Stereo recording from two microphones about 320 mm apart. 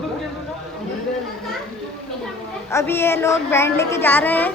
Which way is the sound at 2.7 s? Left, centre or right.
Centre.